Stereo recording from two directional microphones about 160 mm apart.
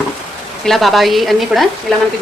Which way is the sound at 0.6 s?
Centre (ahead or behind).